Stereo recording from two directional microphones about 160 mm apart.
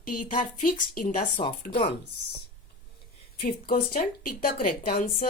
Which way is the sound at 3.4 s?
65° left (ahead or behind).